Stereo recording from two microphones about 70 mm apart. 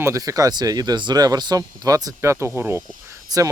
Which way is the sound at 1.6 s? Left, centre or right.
Right.